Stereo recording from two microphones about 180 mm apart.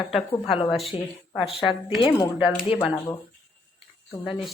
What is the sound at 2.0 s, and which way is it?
Speech, 25° left (ahead or behind).